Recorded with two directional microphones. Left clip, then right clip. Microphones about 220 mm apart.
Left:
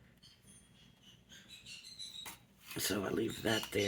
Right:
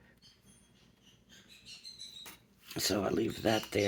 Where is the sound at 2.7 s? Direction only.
30° right (ahead or behind).